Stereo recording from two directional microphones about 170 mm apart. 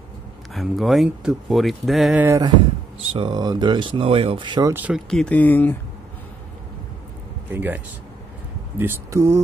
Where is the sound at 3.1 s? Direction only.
30° right (ahead or behind).